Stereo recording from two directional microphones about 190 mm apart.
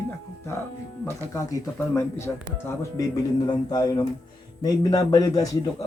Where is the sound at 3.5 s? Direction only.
20° left (ahead or behind).